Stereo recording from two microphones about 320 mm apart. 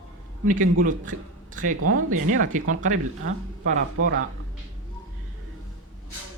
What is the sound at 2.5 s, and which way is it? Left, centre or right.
Speech, right.